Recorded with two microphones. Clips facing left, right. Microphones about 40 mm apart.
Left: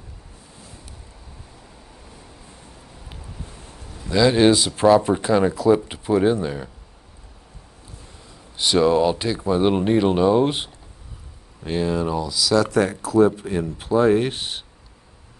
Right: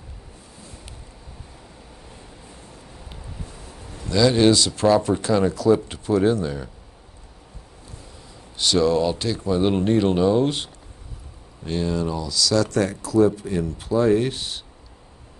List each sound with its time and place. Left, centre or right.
4.0 s speech: centre
8.5 s speech: centre